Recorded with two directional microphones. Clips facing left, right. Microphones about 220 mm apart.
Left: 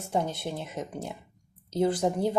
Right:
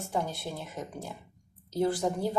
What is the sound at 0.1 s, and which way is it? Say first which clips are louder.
Speech: left 4 dB; 20° left (ahead or behind).